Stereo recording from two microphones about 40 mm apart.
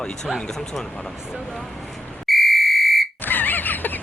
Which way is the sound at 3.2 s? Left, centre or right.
Left.